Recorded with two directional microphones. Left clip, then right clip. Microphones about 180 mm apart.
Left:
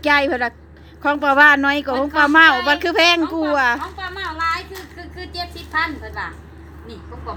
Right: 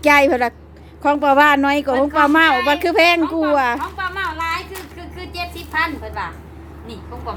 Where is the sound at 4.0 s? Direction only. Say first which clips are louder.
Right 2 dB; 20° left (ahead or behind).